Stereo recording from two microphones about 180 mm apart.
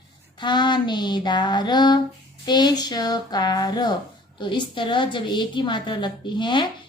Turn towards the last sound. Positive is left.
turn(degrees=25)  # may be behind; listen again after turning